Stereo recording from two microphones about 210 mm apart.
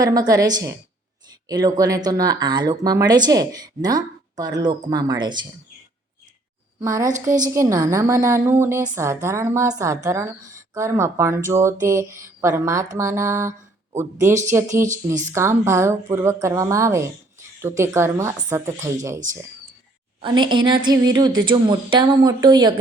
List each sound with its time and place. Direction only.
0.0 s speech: 15° right (ahead or behind)
6.7 s a woman's voice: 15° right (ahead or behind)
20.2 s a woman's voice: 20° right (ahead or behind)